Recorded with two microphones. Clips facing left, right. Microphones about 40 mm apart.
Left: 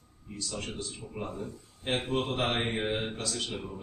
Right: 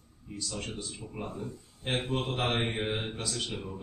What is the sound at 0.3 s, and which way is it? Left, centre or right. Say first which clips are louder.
Mantra: even; centre.